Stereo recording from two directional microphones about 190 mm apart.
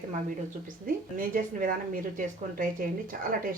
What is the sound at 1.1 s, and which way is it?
A woman's voice, 45° right (ahead or behind).